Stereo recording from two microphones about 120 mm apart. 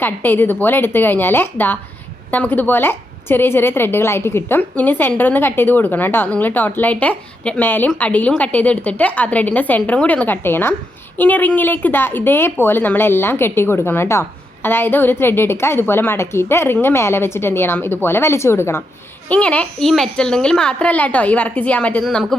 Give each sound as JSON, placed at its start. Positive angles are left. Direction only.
{"t": 0.0, "sound": "a woman's voice", "side_deg": 15}
{"t": 19.3, "sound": "a woman's voice", "side_deg": 10}
{"t": 22.0, "sound": "speech", "side_deg": 0}